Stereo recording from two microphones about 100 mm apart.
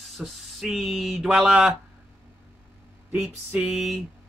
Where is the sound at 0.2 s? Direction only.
Centre (ahead or behind).